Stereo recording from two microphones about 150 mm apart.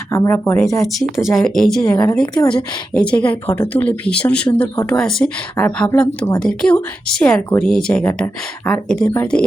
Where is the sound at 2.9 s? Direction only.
5° left (ahead or behind).